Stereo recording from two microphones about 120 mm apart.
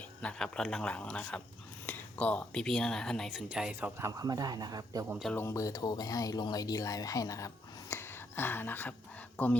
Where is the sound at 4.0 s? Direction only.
30° right (ahead or behind).